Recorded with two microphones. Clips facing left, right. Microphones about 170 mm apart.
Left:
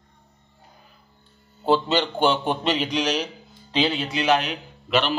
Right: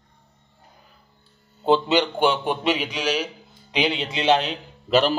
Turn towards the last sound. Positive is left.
turn(degrees=-35)  # may be behind; listen again after turning